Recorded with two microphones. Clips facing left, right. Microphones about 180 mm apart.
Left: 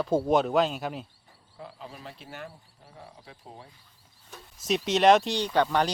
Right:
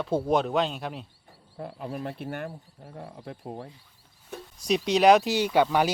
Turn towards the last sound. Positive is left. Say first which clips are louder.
# right 2 dB
turn(degrees=-10)  # may be behind; listen again after turning